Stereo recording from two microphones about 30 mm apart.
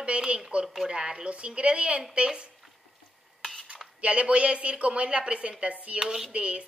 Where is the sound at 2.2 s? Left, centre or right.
Right.